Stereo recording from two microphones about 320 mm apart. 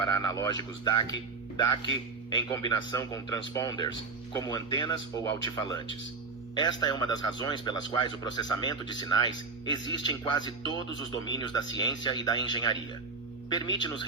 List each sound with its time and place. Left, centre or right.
0.0 s a man's voice: centre